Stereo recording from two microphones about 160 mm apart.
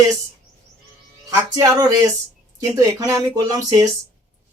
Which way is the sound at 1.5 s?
20° right (ahead or behind).